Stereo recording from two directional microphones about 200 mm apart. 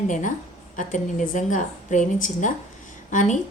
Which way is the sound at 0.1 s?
40° left (ahead or behind).